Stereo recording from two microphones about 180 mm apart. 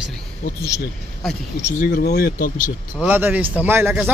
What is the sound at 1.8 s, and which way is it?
Speech, 55° left (ahead or behind).